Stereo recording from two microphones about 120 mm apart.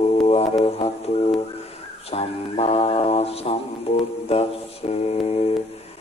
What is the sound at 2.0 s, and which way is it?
Mantra, 55° left (ahead or behind).